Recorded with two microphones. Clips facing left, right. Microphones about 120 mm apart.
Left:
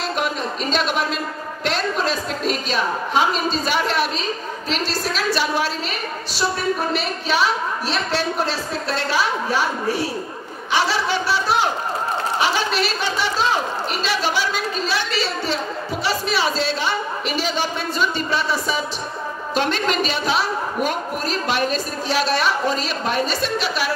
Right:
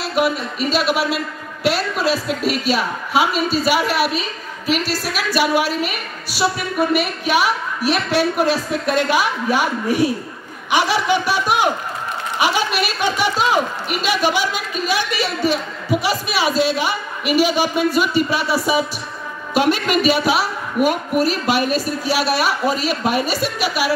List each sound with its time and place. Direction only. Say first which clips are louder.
0.1 s a woman's voice: right 4 dB; 10° right (ahead or behind)